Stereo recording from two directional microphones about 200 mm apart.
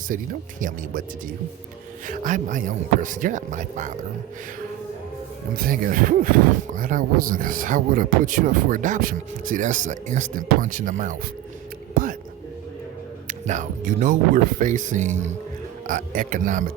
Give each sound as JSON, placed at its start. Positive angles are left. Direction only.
{"t": 0.1, "sound": "speech", "side_deg": -40}
{"t": 2.0, "sound": "speech", "side_deg": -40}
{"t": 5.5, "sound": "speech", "side_deg": -45}
{"t": 13.2, "sound": "speech", "side_deg": -40}